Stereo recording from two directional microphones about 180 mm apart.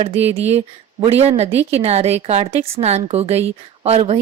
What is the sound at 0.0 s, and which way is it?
A woman's voice, 35° right (ahead or behind).